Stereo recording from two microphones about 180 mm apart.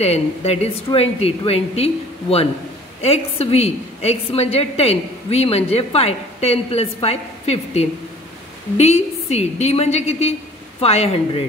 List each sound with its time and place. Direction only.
0.0 s a woman's voice: 35° left (ahead or behind)